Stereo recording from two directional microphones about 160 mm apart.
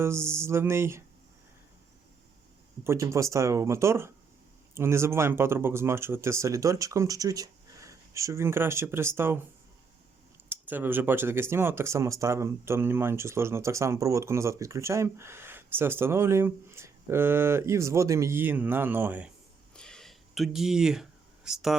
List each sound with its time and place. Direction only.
0.0 s speech: 15° right (ahead or behind)
2.8 s speech: 15° right (ahead or behind)
10.5 s speech: 10° right (ahead or behind)
19.7 s a sound: 5° left (ahead or behind)